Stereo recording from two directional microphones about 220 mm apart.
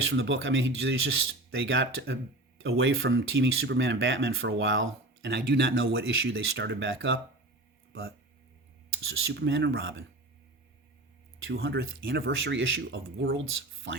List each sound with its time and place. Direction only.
0.1 s speech: 55° right (ahead or behind)
9.0 s speech: 60° right (ahead or behind)
11.4 s speech: 60° right (ahead or behind)